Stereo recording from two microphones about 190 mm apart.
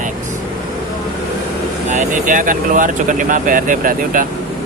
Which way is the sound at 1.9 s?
45° right (ahead or behind).